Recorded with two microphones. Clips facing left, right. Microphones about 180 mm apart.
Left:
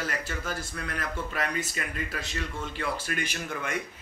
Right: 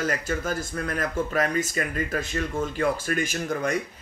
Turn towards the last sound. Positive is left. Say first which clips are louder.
# right 7 dB
turn(degrees=-40)  # may be behind; listen again after turning